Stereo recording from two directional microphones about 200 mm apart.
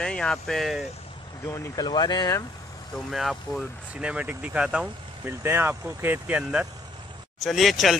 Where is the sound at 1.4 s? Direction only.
20° left (ahead or behind).